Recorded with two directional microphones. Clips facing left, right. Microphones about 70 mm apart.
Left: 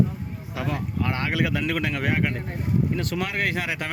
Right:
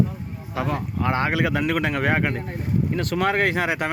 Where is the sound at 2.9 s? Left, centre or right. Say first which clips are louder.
Right 5 dB; right.